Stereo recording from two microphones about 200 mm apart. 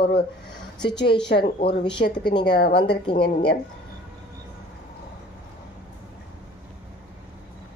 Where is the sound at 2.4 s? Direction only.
55° left (ahead or behind).